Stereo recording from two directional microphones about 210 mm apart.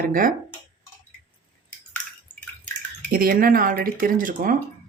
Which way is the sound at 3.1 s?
45° right (ahead or behind).